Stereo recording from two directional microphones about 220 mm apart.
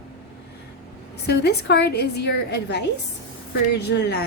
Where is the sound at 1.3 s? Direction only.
50° left (ahead or behind).